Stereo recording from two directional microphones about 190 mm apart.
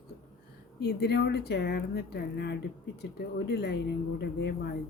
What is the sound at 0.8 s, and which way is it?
Speech, 60° left (ahead or behind).